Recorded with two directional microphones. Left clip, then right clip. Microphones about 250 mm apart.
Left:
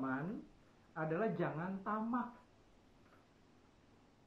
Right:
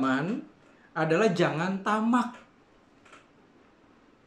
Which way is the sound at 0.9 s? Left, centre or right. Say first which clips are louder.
Right 14 dB; centre.